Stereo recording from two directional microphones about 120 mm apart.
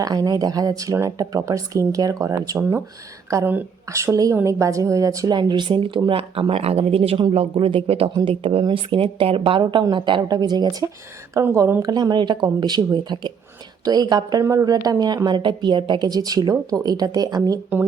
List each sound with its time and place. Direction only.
0.0 s a woman's voice: 30° right (ahead or behind)